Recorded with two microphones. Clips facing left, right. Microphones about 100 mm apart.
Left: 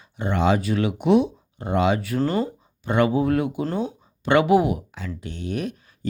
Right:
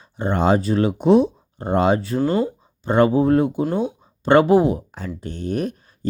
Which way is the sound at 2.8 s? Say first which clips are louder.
Right 4 dB; 35° right (ahead or behind).